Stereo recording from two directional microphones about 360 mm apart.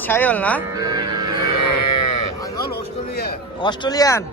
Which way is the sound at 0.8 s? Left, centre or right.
Centre.